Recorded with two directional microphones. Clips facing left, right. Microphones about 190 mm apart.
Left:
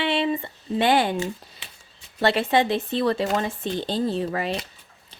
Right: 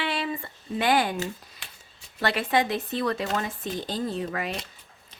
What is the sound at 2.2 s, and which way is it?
A woman's voice, 25° left (ahead or behind).